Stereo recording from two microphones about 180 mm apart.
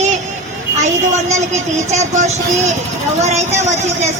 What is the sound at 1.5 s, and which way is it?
A woman's voice, 40° right (ahead or behind).